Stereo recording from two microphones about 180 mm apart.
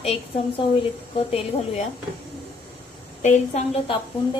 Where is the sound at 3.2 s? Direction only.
40° left (ahead or behind).